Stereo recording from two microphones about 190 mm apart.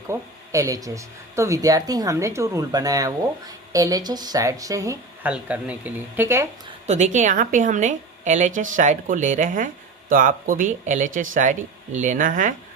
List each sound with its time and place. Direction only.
0.1 s speech: 15° right (ahead or behind)
5.3 s speech: 5° right (ahead or behind)
6.8 s a woman's voice: 35° right (ahead or behind)